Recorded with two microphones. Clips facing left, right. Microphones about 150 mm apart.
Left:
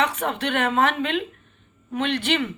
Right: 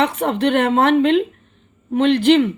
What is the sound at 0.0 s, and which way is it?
Speech, 30° right (ahead or behind).